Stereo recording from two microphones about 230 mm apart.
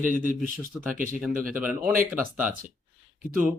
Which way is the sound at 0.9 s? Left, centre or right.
Right.